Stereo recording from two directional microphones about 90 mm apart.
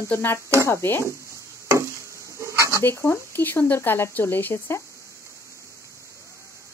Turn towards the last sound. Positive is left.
turn(degrees=25)  # may be behind; listen again after turning